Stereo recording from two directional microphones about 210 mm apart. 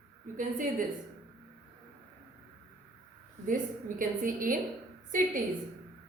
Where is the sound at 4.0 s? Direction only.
40° right (ahead or behind).